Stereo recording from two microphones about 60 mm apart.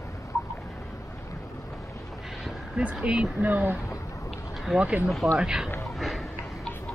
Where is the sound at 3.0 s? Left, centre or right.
Centre.